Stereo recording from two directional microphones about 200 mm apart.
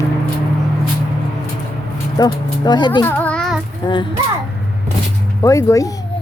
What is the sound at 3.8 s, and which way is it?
Speech, 25° left (ahead or behind).